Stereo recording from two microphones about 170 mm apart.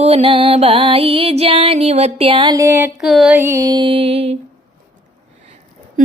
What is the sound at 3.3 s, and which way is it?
Music, 15° right (ahead or behind).